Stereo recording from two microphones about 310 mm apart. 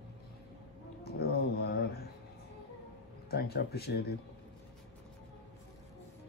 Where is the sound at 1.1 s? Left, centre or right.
Left.